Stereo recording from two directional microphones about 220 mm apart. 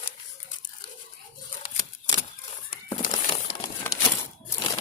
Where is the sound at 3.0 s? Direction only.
35° left (ahead or behind).